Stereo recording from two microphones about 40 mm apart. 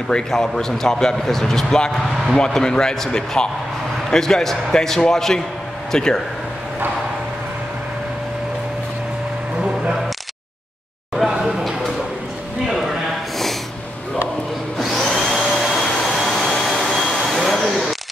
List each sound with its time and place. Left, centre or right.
0.3 s speech: centre
9.6 s music: centre
11.2 s a sound: centre
15.0 s vacuum cleaner: centre
16.9 s a sound: centre
17.4 s vacuum cleaner: centre